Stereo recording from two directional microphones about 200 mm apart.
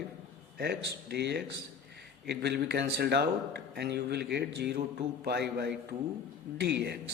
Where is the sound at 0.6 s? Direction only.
55° right (ahead or behind).